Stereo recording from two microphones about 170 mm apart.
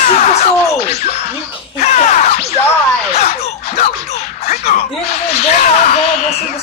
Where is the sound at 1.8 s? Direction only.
45° left (ahead or behind).